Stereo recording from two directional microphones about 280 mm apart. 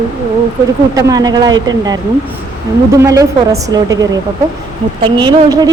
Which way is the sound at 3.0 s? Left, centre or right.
Centre.